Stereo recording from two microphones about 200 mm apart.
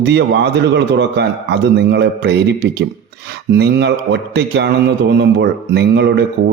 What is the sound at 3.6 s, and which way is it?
A man's voice, 55° right (ahead or behind).